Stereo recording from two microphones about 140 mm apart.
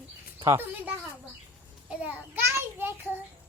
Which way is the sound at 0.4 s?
15° right (ahead or behind).